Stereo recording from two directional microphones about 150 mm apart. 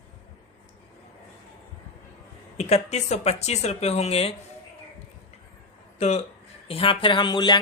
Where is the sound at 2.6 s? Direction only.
45° left (ahead or behind).